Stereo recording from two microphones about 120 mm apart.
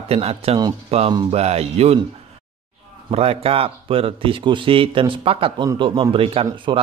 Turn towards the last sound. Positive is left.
turn(degrees=-50)  # may be behind; listen again after turning